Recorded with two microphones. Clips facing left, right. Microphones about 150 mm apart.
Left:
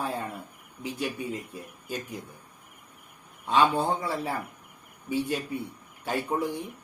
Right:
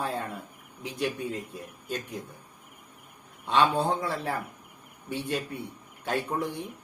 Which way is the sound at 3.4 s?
5° left (ahead or behind).